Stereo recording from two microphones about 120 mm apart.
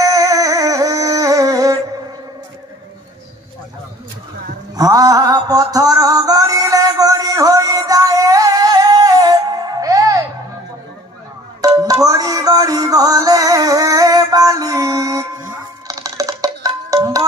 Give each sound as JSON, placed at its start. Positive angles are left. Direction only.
{"t": 0.0, "sound": "music", "side_deg": -30}
{"t": 4.7, "sound": "music", "side_deg": -30}
{"t": 11.6, "sound": "music", "side_deg": -30}